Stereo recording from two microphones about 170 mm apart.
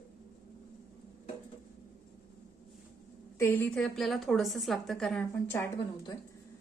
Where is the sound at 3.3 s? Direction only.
10° left (ahead or behind).